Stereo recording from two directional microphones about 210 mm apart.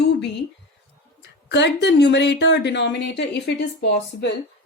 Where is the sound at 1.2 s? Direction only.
55° left (ahead or behind).